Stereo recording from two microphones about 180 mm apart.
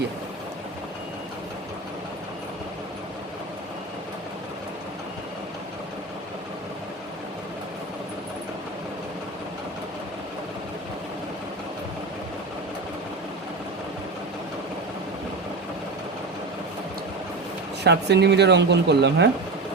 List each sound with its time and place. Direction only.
17.8 s speech: 70° right (ahead or behind)